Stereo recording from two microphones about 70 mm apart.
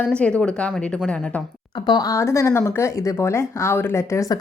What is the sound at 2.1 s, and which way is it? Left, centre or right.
Speech, left.